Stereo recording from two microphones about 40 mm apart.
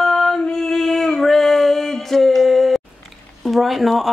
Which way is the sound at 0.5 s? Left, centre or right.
Centre.